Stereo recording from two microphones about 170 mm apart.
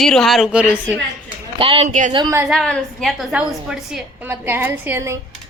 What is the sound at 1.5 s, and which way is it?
Speech, 30° right (ahead or behind).